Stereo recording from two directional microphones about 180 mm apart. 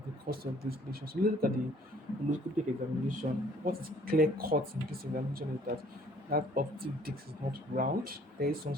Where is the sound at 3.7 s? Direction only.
55° right (ahead or behind).